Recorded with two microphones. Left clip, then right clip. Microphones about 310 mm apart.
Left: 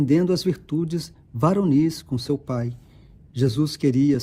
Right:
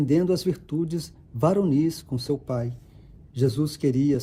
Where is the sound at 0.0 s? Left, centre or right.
Left.